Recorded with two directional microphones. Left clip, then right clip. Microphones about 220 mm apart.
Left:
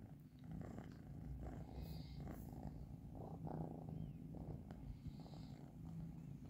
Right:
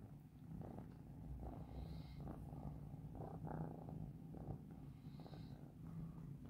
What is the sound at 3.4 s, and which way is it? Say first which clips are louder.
Purr: left 1 dB; 25° left (ahead or behind).